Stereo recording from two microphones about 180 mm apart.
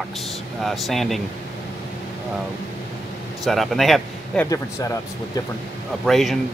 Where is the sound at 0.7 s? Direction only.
Centre (ahead or behind).